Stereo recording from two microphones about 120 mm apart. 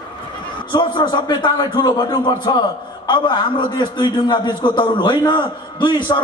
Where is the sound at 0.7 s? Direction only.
40° left (ahead or behind).